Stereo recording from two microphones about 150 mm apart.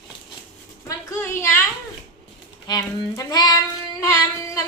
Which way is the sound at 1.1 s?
15° left (ahead or behind).